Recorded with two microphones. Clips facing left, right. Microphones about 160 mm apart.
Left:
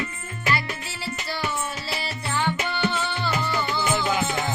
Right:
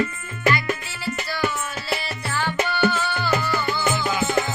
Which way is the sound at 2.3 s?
20° left (ahead or behind).